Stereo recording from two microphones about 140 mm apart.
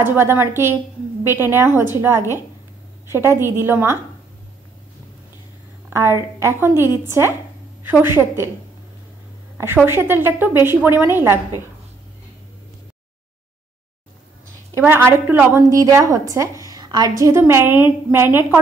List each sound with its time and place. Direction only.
0.0 s a woman's voice: 15° right (ahead or behind)
5.9 s a woman's voice: 20° right (ahead or behind)
6.7 s a woman's voice: 25° left (ahead or behind)
7.1 s a woman's voice: 20° right (ahead or behind)
9.8 s a woman's voice: 15° right (ahead or behind)
14.7 s a woman's voice: 15° right (ahead or behind)